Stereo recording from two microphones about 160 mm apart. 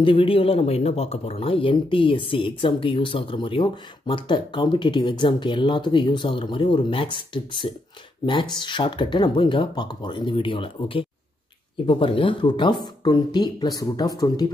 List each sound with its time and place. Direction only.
0.0 s speech: 35° left (ahead or behind)